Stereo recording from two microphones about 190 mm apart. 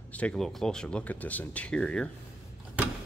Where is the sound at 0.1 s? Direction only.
5° left (ahead or behind).